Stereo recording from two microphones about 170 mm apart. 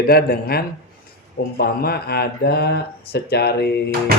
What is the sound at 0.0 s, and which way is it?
Speech, 65° left (ahead or behind).